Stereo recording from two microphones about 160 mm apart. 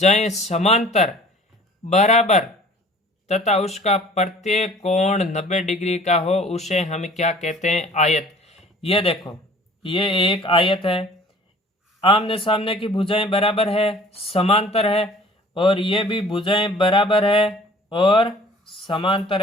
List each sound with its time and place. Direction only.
0.0 s a man's voice: 45° left (ahead or behind)